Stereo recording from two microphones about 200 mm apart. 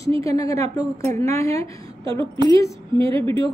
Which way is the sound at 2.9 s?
25° right (ahead or behind).